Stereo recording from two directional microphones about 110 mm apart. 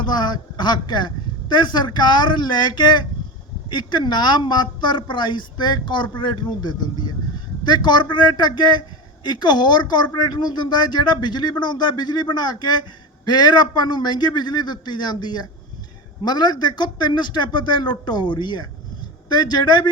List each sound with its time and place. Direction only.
0.0 s a woman's voice: 40° left (ahead or behind)